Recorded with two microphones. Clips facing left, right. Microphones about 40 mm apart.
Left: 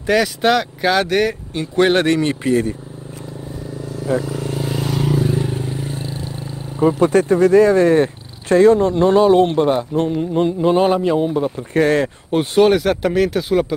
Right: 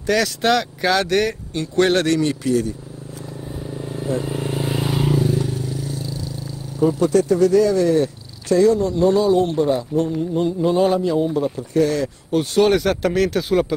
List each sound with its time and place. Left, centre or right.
0.0 s speech: centre; by 2.7 s left
4.2 s vehicle: right
4.6 s vehicle: centre
5.2 s vehicle: left
6.8 s speech: left
11.5 s speech: left
12.6 s speech: centre